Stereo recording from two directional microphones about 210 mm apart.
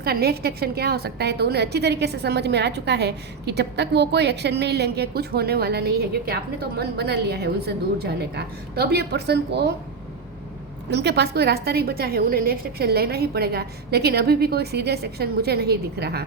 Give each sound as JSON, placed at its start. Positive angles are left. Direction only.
{"t": 0.0, "sound": "a woman's voice", "side_deg": -50}
{"t": 10.9, "sound": "a woman's voice", "side_deg": -50}